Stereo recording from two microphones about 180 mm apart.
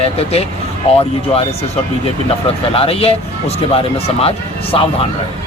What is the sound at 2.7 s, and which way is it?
A man's voice, 35° left (ahead or behind).